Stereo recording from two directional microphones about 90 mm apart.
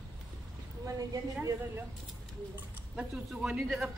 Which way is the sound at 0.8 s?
40° right (ahead or behind).